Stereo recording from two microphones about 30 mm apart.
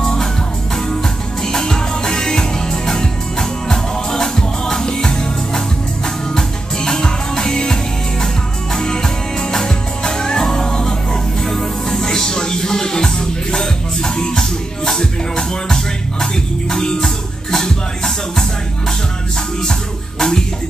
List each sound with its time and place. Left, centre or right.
0.0 s music: centre
1.4 s music: centre
19.6 s music: left